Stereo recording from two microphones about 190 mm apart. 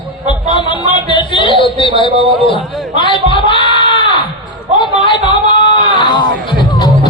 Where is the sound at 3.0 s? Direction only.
25° left (ahead or behind).